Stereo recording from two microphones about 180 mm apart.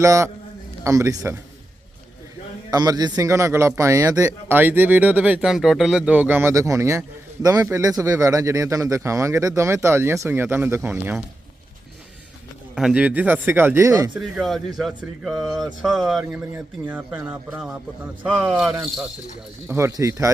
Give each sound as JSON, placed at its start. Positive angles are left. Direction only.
{"t": 0.0, "sound": "a man's voice", "side_deg": -15}
{"t": 2.6, "sound": "a man's voice", "side_deg": -20}
{"t": 12.7, "sound": "a man's voice", "side_deg": -5}
{"t": 14.2, "sound": "speech", "side_deg": 0}
{"t": 16.5, "sound": "a man's voice", "side_deg": -10}
{"t": 19.6, "sound": "a man's voice", "side_deg": -15}